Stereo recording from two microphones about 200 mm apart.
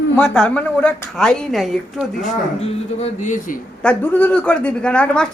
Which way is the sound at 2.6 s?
30° left (ahead or behind).